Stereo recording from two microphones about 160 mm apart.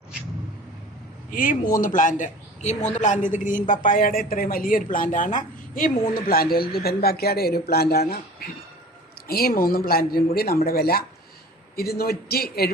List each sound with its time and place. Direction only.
1.3 s speech: 60° left (ahead or behind)
5.7 s a woman's voice: 65° left (ahead or behind)